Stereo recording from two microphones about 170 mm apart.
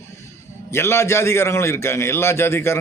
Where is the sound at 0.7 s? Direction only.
15° left (ahead or behind).